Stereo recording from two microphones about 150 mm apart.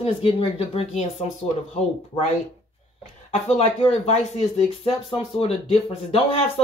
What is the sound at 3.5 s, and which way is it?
Speech, 45° left (ahead or behind).